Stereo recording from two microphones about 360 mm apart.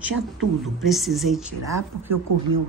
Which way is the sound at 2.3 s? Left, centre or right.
Right.